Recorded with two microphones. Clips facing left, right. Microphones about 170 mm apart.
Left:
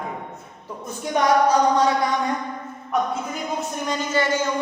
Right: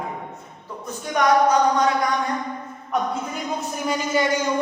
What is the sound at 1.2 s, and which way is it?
Speech, 30° left (ahead or behind).